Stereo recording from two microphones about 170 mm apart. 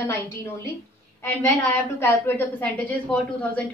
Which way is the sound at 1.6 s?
15° left (ahead or behind).